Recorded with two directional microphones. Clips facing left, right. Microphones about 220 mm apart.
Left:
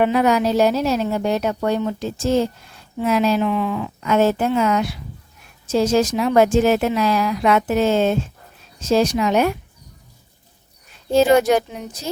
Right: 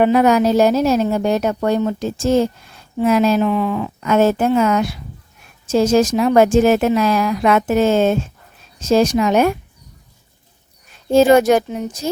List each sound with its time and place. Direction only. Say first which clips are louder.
0.0 s speech: right 4 dB; 45° right (ahead or behind)
11.1 s speech: right 3 dB; 45° right (ahead or behind)